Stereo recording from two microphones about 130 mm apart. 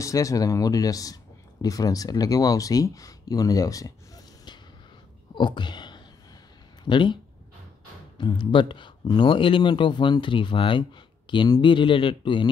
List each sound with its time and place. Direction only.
0.0 s speech: 25° left (ahead or behind)
5.3 s whispering: 35° left (ahead or behind)
6.8 s speech: 40° left (ahead or behind)
8.2 s speech: 35° left (ahead or behind)